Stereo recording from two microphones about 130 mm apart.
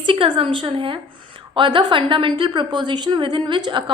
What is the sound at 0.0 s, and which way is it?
A woman's voice, 40° right (ahead or behind).